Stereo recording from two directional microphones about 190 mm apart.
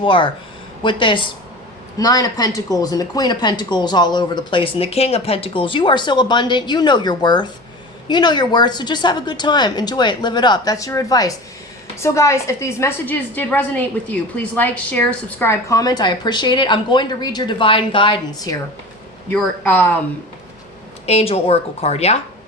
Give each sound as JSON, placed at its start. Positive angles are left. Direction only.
{"t": 0.0, "sound": "a woman's voice", "side_deg": 25}
{"t": 19.3, "sound": "a man's voice", "side_deg": 5}
{"t": 21.1, "sound": "a woman's voice", "side_deg": 30}